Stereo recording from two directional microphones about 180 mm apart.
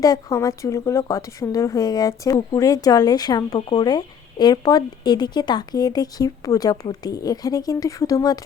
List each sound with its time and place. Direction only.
0.0 s a woman's voice: 20° left (ahead or behind)